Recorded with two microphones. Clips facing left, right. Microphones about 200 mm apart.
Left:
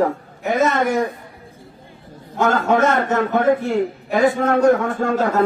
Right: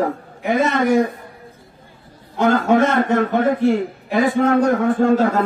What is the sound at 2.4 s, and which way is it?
A man's voice, 45° left (ahead or behind).